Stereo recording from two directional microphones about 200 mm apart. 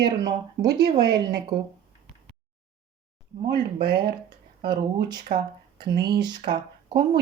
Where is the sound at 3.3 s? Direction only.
45° right (ahead or behind).